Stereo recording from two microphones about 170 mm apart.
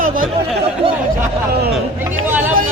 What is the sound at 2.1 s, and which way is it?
Speech, 15° right (ahead or behind).